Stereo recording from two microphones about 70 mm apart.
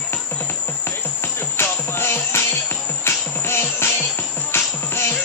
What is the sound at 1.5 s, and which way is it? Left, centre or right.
Music, left.